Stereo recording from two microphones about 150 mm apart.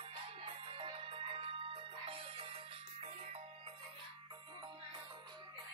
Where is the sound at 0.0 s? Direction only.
40° right (ahead or behind).